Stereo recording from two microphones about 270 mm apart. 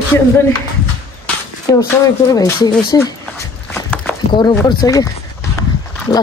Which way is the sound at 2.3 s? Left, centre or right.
Centre.